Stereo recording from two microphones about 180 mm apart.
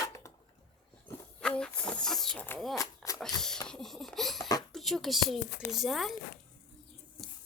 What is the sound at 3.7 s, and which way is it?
Baby laughter, centre (ahead or behind).